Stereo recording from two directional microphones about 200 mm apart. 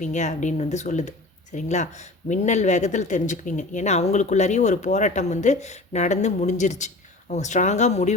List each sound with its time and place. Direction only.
0.0 s speech: 35° left (ahead or behind)